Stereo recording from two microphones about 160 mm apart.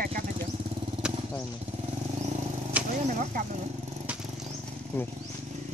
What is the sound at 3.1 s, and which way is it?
Speech, 50° right (ahead or behind).